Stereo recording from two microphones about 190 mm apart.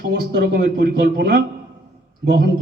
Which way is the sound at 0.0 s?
55° right (ahead or behind).